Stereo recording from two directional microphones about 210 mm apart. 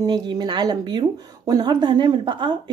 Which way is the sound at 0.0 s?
20° right (ahead or behind).